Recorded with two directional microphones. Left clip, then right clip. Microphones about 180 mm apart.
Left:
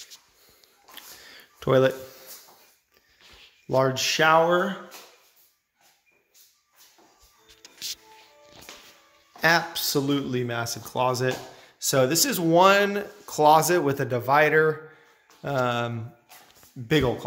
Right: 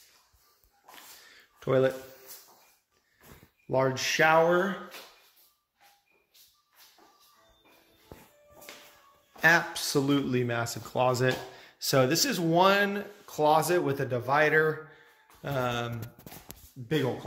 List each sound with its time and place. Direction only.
1.3 s a sound: 25° left (ahead or behind)
3.6 s a man's voice: 15° left (ahead or behind)
9.4 s a man's voice: 5° left (ahead or behind); by 15.9 s 30° left (ahead or behind)